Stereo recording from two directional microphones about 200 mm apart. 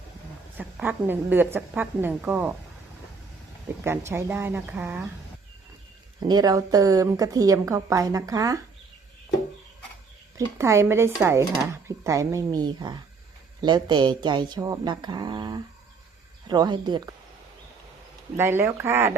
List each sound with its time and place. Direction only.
0.5 s a woman's voice: 10° right (ahead or behind)
3.8 s a woman's voice: 10° right (ahead or behind)
6.1 s a woman's voice: 20° right (ahead or behind)
10.3 s a woman's voice: 15° right (ahead or behind)
18.3 s a woman's voice: 10° right (ahead or behind)